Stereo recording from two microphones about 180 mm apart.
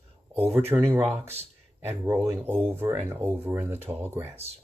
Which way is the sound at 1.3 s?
35° right (ahead or behind).